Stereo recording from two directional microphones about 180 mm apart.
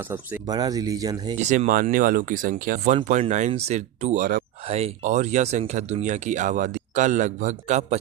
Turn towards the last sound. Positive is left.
turn(degrees=-40)  # may be behind; listen again after turning